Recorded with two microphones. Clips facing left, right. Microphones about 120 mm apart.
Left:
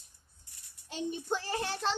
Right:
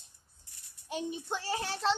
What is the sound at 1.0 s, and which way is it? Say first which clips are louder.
Speech: left 3 dB; centre (ahead or behind).